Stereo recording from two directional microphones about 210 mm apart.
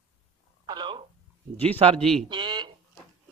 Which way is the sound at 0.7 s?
20° right (ahead or behind).